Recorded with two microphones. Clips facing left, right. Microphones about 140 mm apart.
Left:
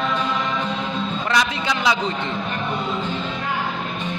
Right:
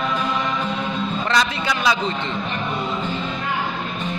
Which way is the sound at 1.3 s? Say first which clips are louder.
Even; 20° left (ahead or behind).